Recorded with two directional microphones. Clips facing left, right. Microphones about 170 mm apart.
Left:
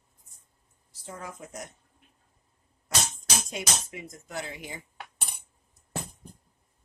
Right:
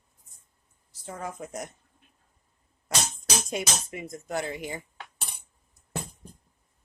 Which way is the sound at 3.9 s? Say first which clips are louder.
Right 7 dB; 50° right (ahead or behind).